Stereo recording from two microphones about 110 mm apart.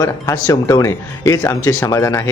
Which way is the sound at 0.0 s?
30° left (ahead or behind).